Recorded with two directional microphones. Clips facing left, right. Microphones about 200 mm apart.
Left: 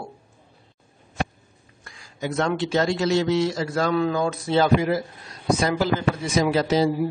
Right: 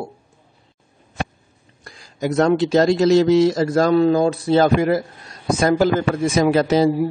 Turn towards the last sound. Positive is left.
turn(degrees=-55)  # may be behind; listen again after turning